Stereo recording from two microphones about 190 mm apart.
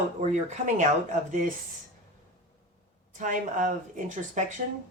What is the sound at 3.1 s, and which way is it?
A woman's voice, 40° right (ahead or behind).